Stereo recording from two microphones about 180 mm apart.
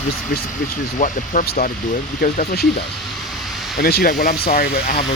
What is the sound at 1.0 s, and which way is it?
Speech, 50° left (ahead or behind).